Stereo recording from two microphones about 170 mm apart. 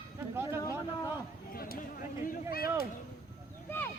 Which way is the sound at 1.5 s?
60° left (ahead or behind).